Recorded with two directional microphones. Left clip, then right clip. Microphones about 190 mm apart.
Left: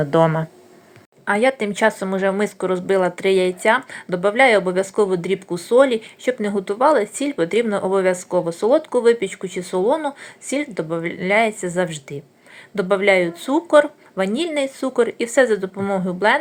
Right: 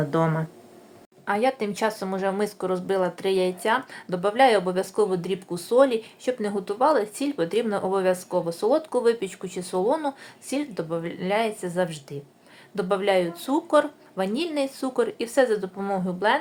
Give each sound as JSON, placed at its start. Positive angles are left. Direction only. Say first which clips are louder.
{"t": 0.0, "sound": "speech", "louder": "left 8 dB", "side_deg": 15}